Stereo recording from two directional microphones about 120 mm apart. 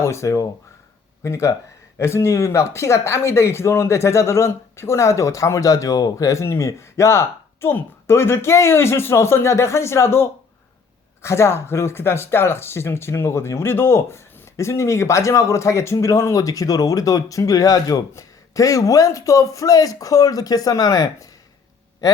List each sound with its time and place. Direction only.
0.0 s speech: 25° left (ahead or behind)